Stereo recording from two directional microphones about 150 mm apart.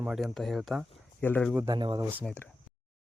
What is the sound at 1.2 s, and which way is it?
Speech, 10° left (ahead or behind).